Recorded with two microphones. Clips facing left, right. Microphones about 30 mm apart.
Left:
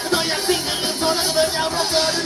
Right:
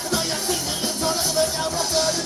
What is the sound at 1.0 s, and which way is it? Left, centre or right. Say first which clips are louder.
Music: left 3 dB; left.